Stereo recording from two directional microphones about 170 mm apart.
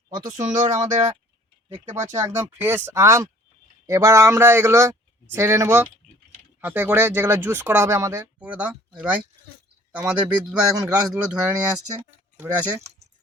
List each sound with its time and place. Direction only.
0.3 s speech: 45° right (ahead or behind)
1.7 s speech: 15° right (ahead or behind)
2.0 s speech: 45° right (ahead or behind)
2.2 s speech: 15° right (ahead or behind)
8.4 s a man's voice: 5° right (ahead or behind)